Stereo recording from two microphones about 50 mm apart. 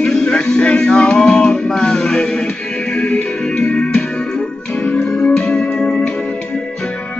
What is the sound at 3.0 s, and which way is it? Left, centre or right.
Music, left.